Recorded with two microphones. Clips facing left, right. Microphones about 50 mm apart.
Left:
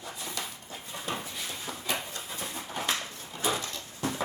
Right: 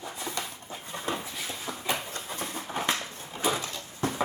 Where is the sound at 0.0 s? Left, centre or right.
Right.